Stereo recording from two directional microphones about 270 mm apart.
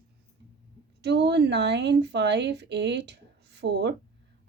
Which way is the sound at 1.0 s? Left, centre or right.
Right.